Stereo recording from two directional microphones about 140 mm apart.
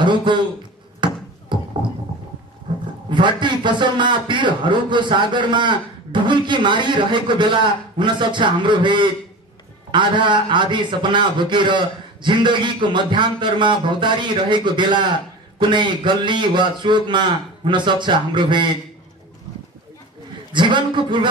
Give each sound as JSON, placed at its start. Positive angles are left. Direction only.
{"t": 0.0, "sound": "a man's voice", "side_deg": -35}
{"t": 1.0, "sound": "a sound", "side_deg": -35}
{"t": 3.1, "sound": "a man's voice", "side_deg": -35}
{"t": 20.5, "sound": "a man's voice", "side_deg": -35}